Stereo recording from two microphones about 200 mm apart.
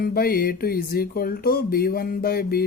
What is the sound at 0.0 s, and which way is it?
Speech, 50° left (ahead or behind).